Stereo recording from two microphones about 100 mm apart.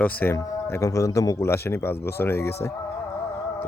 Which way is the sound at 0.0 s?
15° left (ahead or behind).